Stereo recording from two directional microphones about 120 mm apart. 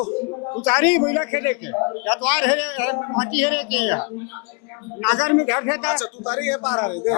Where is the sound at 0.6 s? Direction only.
20° left (ahead or behind).